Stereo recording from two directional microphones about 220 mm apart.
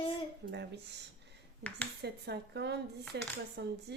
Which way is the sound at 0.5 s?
50° right (ahead or behind).